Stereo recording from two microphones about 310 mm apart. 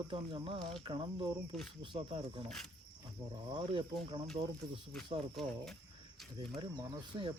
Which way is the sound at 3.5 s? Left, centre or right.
Centre.